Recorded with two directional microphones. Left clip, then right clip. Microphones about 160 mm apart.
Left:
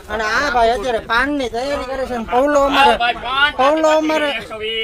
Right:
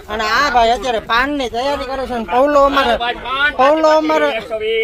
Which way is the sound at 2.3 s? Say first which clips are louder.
Right 2 dB; 15° left (ahead or behind).